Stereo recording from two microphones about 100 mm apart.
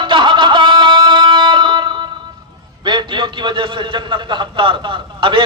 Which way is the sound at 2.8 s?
55° right (ahead or behind).